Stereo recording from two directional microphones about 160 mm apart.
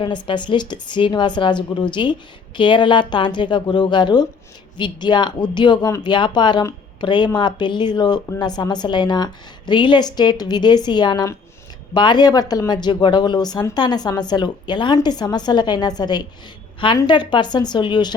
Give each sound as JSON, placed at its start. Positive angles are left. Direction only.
{"t": 0.0, "sound": "speech", "side_deg": 30}